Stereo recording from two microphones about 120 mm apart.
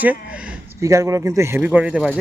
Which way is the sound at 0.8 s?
25° right (ahead or behind).